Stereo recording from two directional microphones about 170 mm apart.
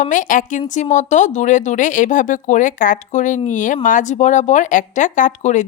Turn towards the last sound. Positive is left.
turn(degrees=45)  # may be behind; listen again after turning